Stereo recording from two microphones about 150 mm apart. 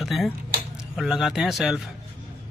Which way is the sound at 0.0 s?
Centre (ahead or behind).